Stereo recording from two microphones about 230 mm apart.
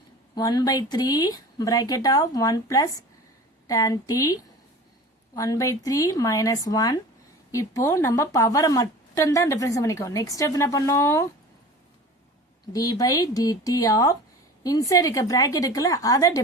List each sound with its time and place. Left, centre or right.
0.3 s a woman's voice: centre
12.7 s a woman's voice: centre